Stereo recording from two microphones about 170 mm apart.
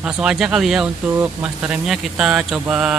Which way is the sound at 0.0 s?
5° right (ahead or behind).